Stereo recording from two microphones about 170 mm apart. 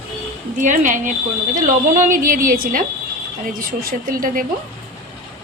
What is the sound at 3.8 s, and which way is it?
Speech, 55° right (ahead or behind).